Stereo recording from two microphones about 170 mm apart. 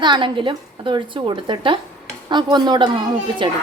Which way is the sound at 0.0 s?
30° right (ahead or behind).